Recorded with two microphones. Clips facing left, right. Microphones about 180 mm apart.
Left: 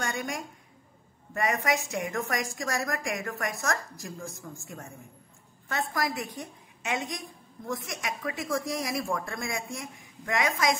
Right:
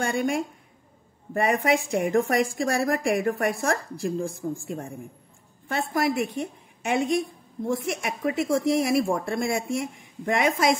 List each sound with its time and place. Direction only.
1.3 s a woman's voice: 30° right (ahead or behind)